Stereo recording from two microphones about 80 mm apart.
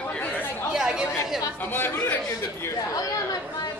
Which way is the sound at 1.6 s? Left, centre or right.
Left.